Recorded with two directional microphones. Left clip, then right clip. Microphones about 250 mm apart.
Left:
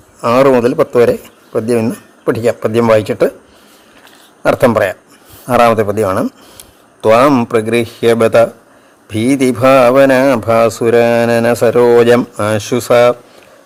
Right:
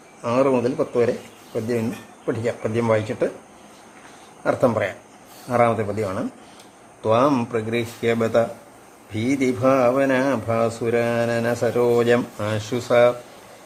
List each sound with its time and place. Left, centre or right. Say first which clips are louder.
0.2 s speech: left 11 dB; left
4.4 s speech: left 10 dB; left